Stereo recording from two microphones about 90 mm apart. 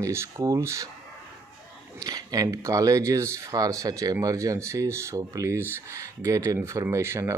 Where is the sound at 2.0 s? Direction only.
45° right (ahead or behind).